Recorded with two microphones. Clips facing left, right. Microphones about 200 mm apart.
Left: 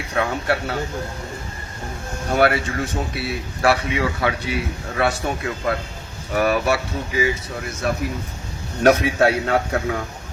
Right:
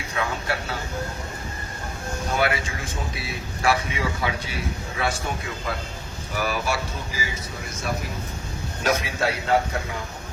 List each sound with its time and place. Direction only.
0.2 s a man's voice: 60° left (ahead or behind)
2.3 s a man's voice: 60° left (ahead or behind)
6.3 s a man's voice: 60° left (ahead or behind)
8.8 s a man's voice: 60° left (ahead or behind)